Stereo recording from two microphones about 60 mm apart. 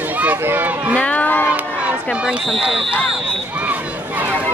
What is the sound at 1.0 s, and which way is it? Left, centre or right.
Run, left.